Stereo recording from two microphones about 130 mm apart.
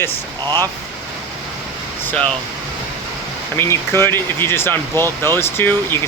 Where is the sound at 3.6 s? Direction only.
20° left (ahead or behind).